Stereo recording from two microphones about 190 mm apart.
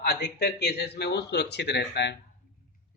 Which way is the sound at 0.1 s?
60° left (ahead or behind).